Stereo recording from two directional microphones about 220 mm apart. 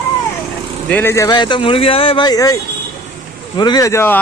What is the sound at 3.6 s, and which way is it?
Speech, 20° left (ahead or behind).